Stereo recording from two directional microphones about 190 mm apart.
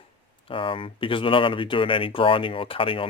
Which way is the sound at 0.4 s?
30° left (ahead or behind).